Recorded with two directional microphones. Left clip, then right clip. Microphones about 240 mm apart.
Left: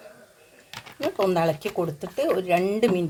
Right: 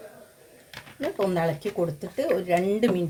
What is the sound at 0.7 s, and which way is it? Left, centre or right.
Speech, left.